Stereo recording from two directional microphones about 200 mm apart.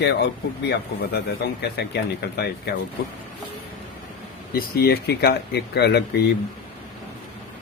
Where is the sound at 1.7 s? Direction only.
55° left (ahead or behind).